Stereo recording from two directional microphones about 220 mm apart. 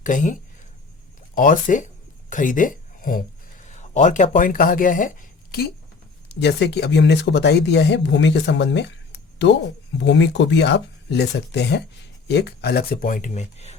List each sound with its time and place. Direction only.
0.0 s speech: 35° left (ahead or behind)
1.4 s speech: 35° left (ahead or behind)
6.2 s speech: 50° left (ahead or behind)
10.0 s speech: 55° left (ahead or behind); by 13.7 s 30° left (ahead or behind)